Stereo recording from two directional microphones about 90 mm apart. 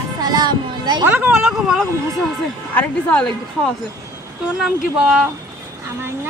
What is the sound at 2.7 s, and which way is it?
Speech, 20° left (ahead or behind).